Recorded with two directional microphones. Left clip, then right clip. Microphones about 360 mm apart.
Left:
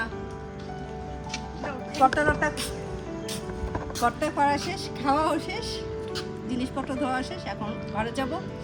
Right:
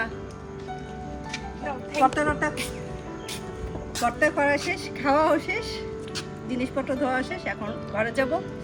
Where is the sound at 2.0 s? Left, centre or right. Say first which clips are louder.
Left 1 dB; centre.